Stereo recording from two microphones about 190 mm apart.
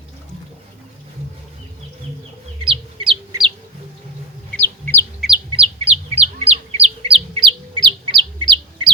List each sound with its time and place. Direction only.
2.6 s chicken: 25° right (ahead or behind)
4.5 s chicken: 10° left (ahead or behind)
5.5 s bird: 30° right (ahead or behind)